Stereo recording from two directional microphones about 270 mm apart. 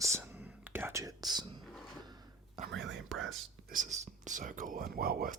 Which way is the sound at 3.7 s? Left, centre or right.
Right.